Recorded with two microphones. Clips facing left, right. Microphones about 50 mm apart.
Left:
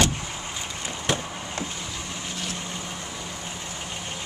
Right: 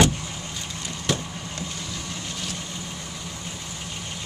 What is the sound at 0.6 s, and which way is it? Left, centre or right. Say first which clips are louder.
Vehicle: left 1 dB; left.